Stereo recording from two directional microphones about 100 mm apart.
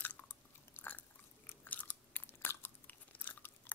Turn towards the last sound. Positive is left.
turn(degrees=20)  # may be behind; listen again after turning